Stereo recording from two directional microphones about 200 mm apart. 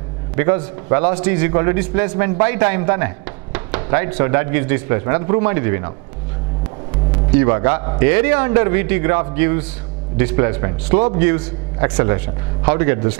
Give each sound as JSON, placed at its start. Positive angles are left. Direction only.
{"t": 0.4, "sound": "a man's voice", "side_deg": -15}
{"t": 7.1, "sound": "music", "side_deg": -15}
{"t": 7.8, "sound": "a man's voice", "side_deg": -15}